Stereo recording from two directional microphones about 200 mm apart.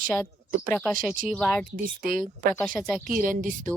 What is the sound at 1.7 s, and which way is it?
Speech, 45° right (ahead or behind).